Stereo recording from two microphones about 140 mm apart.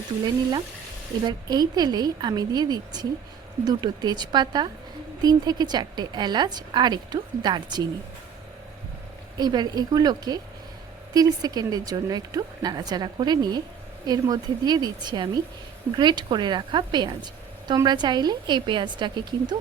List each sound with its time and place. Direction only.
1.2 s a woman's voice: 30° right (ahead or behind)
9.4 s a woman's voice: 30° right (ahead or behind)